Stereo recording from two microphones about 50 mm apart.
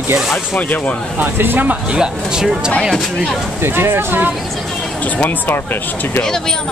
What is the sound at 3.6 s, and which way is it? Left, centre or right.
Speech, right.